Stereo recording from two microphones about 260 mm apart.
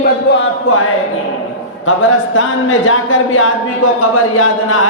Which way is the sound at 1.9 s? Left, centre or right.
Left.